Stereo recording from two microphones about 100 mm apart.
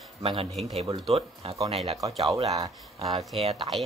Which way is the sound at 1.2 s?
80° right.